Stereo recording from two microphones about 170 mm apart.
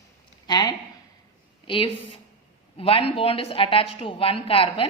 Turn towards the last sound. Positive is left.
turn(degrees=30)  # may be behind; listen again after turning